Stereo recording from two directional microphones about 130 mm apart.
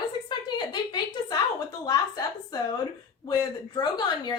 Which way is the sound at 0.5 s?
35° left (ahead or behind).